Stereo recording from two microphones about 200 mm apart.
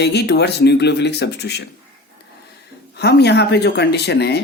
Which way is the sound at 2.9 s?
55° left (ahead or behind).